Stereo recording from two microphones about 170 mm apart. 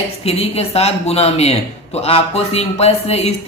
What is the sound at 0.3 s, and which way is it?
Speech, 35° left (ahead or behind).